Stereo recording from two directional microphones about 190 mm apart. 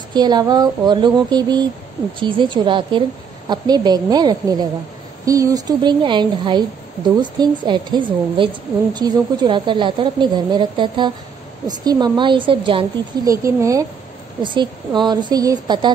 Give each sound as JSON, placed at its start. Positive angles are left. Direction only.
{"t": 0.1, "sound": "a woman's voice", "side_deg": -20}